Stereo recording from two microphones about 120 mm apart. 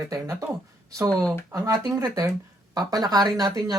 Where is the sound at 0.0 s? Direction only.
30° right (ahead or behind).